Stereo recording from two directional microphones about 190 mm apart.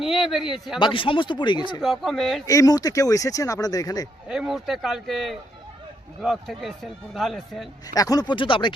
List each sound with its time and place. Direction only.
0.0 s speech: centre (ahead or behind)
0.8 s speech: 25° left (ahead or behind)
1.8 s speech: centre (ahead or behind)
2.5 s speech: 20° left (ahead or behind)
4.3 s speech: centre (ahead or behind)
7.9 s speech: 20° left (ahead or behind)